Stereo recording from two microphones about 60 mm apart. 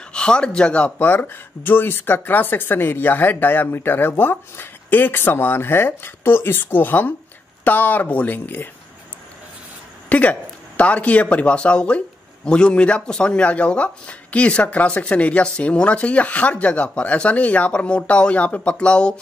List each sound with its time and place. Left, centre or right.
0.1 s speech: centre
1.0 s speech: left
10.0 s speech: left